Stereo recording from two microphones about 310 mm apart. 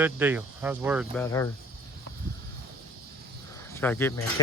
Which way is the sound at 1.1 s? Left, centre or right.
Centre.